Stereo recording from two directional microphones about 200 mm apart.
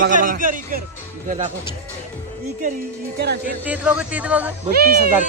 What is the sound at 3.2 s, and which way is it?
Speech, 55° right (ahead or behind).